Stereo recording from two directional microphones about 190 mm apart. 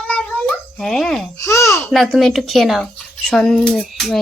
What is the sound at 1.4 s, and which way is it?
Speech, 15° left (ahead or behind).